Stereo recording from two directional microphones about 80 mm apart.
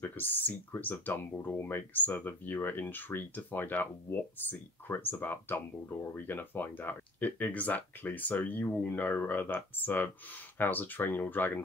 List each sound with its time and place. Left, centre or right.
0.0 s speech: left